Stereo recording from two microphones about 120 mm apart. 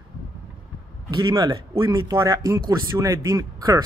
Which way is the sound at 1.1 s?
35° right (ahead or behind).